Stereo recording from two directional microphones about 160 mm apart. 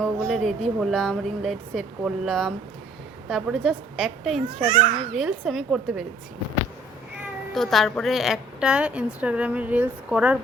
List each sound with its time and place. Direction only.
0.0 s speech: centre (ahead or behind)
4.7 s a child's voice: 40° right (ahead or behind)
5.1 s speech: centre (ahead or behind)
7.5 s a woman's voice: centre (ahead or behind)